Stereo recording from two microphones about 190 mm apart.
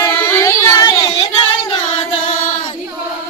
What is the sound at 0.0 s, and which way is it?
Child singing, 10° left (ahead or behind).